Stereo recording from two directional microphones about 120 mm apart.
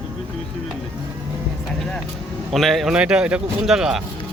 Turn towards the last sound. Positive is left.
turn(degrees=-5)  # may be behind; listen again after turning